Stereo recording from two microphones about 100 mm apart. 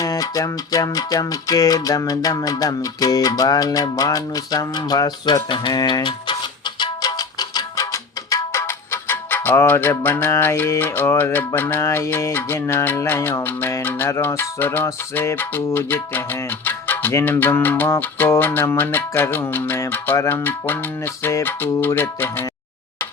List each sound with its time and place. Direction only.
0.0 s music: 35° left (ahead or behind); by 22.4 s 20° left (ahead or behind)